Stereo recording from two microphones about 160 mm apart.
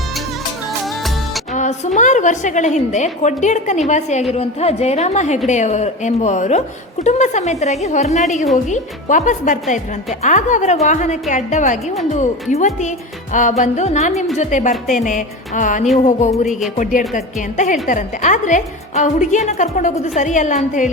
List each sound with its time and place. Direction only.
1.5 s music: 50° left (ahead or behind)
2.0 s a woman's voice: 50° left (ahead or behind)